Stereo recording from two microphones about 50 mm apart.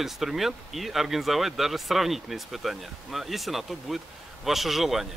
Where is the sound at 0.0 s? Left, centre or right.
Centre.